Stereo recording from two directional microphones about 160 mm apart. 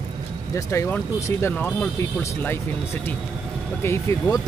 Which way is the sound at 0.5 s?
20° left (ahead or behind).